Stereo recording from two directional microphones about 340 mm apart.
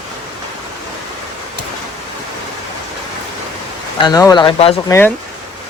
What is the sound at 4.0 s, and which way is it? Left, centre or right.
Speech, centre.